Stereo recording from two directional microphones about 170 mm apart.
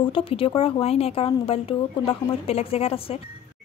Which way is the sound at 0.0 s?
30° left (ahead or behind).